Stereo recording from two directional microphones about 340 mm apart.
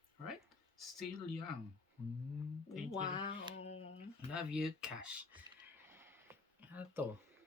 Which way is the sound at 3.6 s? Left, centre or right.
Centre.